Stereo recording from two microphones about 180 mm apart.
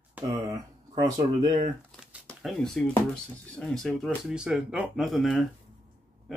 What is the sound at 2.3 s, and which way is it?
Speech, 5° left (ahead or behind).